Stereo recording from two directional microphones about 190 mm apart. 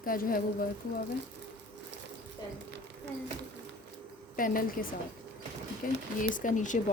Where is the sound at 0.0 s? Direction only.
50° left (ahead or behind).